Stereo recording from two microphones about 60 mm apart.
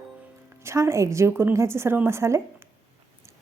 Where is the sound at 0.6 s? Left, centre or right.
Right.